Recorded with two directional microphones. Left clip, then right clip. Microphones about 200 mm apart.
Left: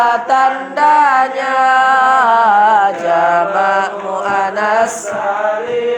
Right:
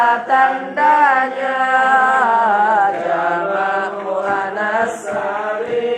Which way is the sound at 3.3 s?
45° left (ahead or behind).